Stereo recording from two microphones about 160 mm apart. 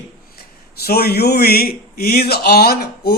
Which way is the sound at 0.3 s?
75° left (ahead or behind).